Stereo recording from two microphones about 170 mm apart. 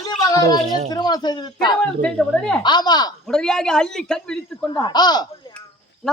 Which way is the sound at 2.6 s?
25° left (ahead or behind).